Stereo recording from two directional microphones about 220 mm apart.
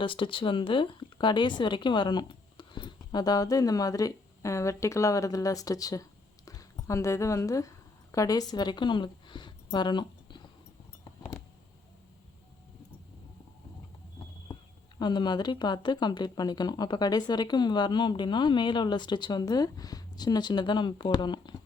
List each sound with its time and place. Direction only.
0.0 s speech: 25° left (ahead or behind)
9.7 s a sound: 20° left (ahead or behind)
14.9 s speech: 20° left (ahead or behind)